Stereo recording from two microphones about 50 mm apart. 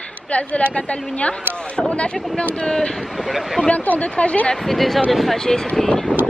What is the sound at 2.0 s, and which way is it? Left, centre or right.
Speech, left.